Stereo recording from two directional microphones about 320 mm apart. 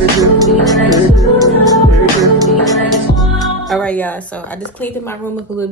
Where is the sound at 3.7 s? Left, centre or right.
Centre.